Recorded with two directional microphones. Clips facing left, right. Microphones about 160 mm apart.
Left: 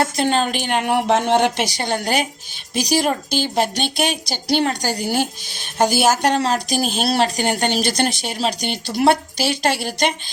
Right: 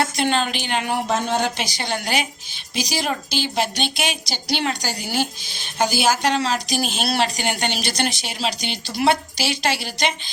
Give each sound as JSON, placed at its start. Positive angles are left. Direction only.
{"t": 0.0, "sound": "speech", "side_deg": 40}